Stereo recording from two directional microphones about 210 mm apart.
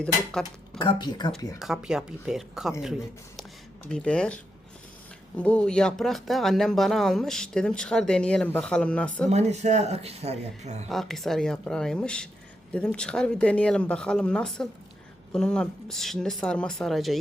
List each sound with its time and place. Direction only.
0.0 s speech: 5° left (ahead or behind)
0.8 s speech: 20° left (ahead or behind)
1.5 s speech: centre (ahead or behind)
3.8 s speech: 5° left (ahead or behind)
5.4 s speech: 5° left (ahead or behind)
9.3 s speech: 35° right (ahead or behind)
10.8 s speech: centre (ahead or behind)